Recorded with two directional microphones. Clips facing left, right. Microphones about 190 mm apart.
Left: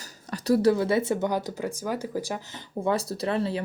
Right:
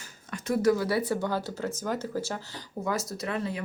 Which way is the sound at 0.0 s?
40° left (ahead or behind).